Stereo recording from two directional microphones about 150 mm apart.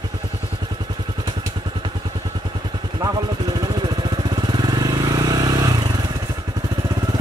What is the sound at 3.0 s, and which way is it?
Vehicle, 30° right (ahead or behind).